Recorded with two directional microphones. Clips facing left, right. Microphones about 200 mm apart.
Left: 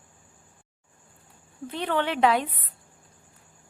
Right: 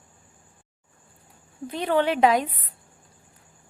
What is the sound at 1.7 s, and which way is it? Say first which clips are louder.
Speech: right 4 dB; 10° right (ahead or behind).